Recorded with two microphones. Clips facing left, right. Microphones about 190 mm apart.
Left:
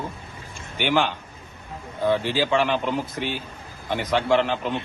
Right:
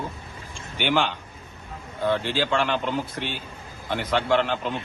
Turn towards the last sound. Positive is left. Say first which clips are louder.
# left 2 dB
turn(degrees=0)  # may be behind; listen again after turning